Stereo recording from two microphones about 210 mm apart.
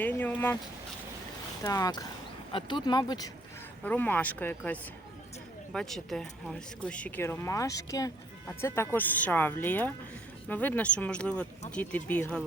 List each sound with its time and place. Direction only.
0.0 s speech: 10° left (ahead or behind)
1.6 s speech: 15° left (ahead or behind)